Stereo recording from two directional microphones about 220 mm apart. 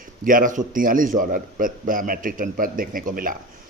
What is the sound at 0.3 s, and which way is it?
Speech, 40° right (ahead or behind).